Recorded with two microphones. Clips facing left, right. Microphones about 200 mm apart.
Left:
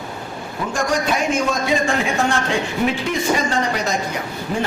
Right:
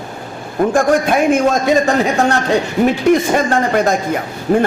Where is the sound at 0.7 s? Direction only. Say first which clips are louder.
Right 6 dB; 55° right (ahead or behind).